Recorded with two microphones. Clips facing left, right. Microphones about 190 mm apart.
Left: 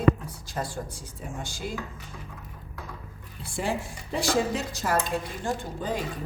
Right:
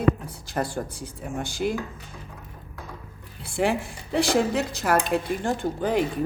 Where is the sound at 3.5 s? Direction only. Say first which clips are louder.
Right 6 dB; 65° right (ahead or behind).